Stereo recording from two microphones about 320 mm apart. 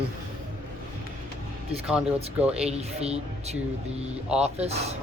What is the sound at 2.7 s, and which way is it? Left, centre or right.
A woman's voice, centre.